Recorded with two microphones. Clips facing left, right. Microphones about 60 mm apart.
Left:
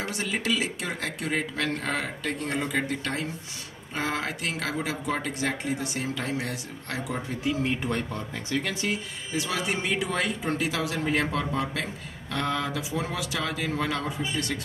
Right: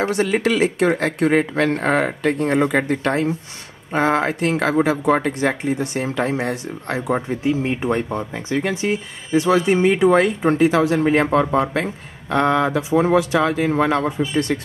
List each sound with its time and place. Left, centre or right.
0.0 s speech: right
7.4 s speech: right